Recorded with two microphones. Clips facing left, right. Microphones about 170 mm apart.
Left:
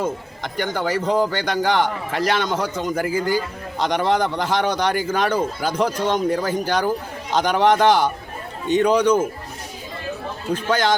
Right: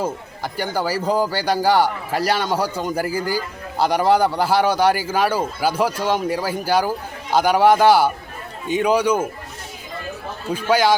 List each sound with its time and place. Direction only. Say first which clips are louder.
0.0 s a man's voice: even; 5° right (ahead or behind)
2.1 s a man's voice: even; 35° right (ahead or behind)
2.4 s a man's voice: right 1 dB; 10° right (ahead or behind)
2.9 s a man's voice: even; 35° right (ahead or behind)
3.2 s a man's voice: left 2 dB; 10° right (ahead or behind)
10.5 s a man's voice: right 3 dB; 10° right (ahead or behind)